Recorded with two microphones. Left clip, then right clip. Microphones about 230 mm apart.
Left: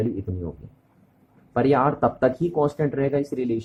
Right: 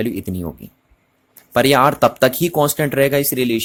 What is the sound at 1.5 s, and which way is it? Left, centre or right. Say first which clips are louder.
Speech: right 7 dB; right.